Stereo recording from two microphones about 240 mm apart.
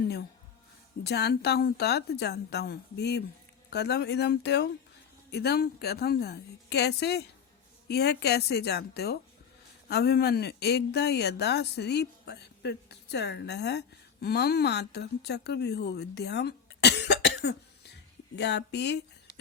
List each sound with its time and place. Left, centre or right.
1.0 s a woman's voice: left